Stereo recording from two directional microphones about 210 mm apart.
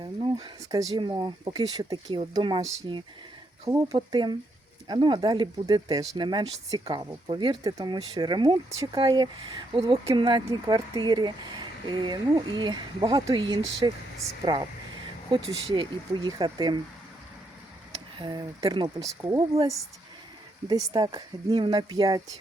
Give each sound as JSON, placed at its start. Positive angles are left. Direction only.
{"t": 0.0, "sound": "speech", "side_deg": -25}
{"t": 18.2, "sound": "speech", "side_deg": -20}
{"t": 20.7, "sound": "speech", "side_deg": -20}